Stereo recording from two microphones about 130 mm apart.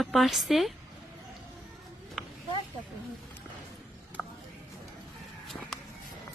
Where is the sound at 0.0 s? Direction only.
Centre (ahead or behind).